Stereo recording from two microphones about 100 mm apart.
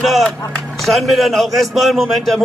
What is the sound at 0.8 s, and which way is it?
A man's voice, centre (ahead or behind).